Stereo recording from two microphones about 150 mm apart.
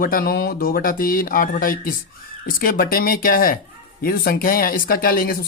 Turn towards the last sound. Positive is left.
turn(degrees=75)  # may be behind; listen again after turning